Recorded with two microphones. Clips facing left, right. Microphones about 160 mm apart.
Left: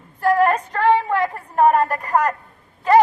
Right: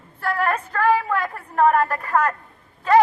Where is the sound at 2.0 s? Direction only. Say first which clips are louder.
Left 2 dB; 35° left (ahead or behind).